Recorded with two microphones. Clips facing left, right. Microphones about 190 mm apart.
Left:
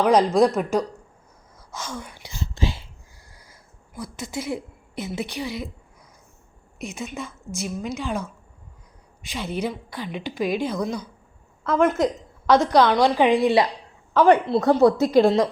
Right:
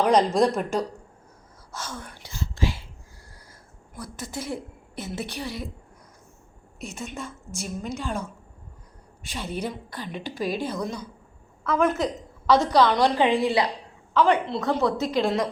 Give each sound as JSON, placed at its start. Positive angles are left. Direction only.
{"t": 0.0, "sound": "a woman's voice", "side_deg": 10}
{"t": 1.7, "sound": "a sound", "side_deg": 10}
{"t": 3.9, "sound": "a woman's voice", "side_deg": 10}
{"t": 6.7, "sound": "a woman's voice", "side_deg": 10}
{"t": 9.2, "sound": "a woman's voice", "side_deg": 10}
{"t": 11.6, "sound": "a woman's voice", "side_deg": 20}
{"t": 12.5, "sound": "a woman's voice", "side_deg": 10}
{"t": 14.1, "sound": "a woman's voice", "side_deg": 45}